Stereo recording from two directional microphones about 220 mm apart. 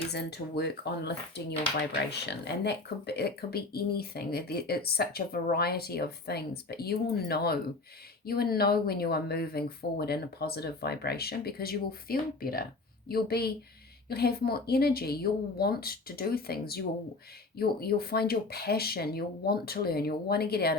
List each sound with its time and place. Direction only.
0.1 s speech: 50° left (ahead or behind)